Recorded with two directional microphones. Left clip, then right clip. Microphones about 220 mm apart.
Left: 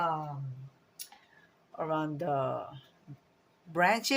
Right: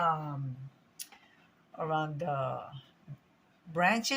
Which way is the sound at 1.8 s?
35° left (ahead or behind).